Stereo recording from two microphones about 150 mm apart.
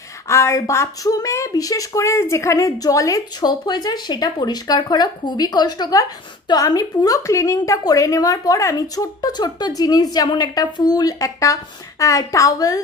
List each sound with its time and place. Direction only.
0.3 s speech: 20° left (ahead or behind)